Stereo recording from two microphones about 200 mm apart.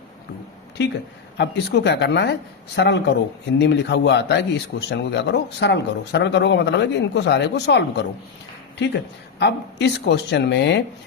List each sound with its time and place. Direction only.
0.8 s a man's voice: 60° left (ahead or behind)
9.4 s a man's voice: 60° left (ahead or behind)